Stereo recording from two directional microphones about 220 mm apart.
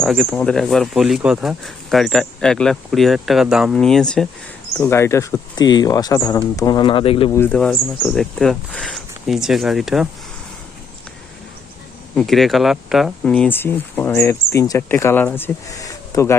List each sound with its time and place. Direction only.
0.0 s speech: centre (ahead or behind); by 7.3 s 25° left (ahead or behind)
7.3 s speech: 10° left (ahead or behind)
12.1 s speech: centre (ahead or behind)